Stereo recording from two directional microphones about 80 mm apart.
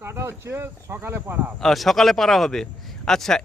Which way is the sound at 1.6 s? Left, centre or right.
Centre.